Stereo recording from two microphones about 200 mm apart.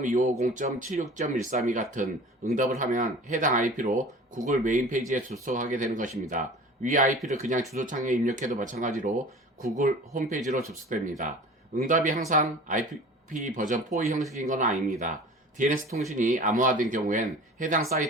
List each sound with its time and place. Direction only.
0.0 s speech: 35° right (ahead or behind)